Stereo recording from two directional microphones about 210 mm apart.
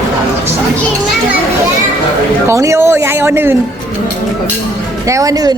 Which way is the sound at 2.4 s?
15° right (ahead or behind).